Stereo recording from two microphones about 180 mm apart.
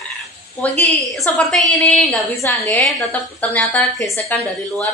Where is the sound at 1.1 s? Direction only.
Centre (ahead or behind).